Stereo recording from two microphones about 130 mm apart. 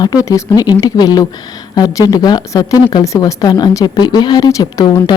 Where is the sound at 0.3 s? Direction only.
25° left (ahead or behind).